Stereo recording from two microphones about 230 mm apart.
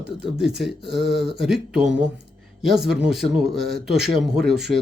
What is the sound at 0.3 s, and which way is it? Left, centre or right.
Speech, centre.